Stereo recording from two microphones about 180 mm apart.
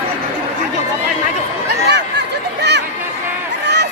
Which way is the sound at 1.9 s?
70° right (ahead or behind).